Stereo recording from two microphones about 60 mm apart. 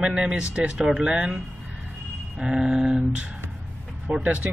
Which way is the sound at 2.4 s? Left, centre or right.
Centre.